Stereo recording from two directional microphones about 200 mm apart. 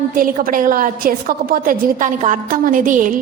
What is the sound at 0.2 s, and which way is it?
A woman's voice, 45° right (ahead or behind).